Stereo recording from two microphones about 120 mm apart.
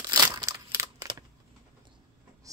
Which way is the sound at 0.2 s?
25° right (ahead or behind).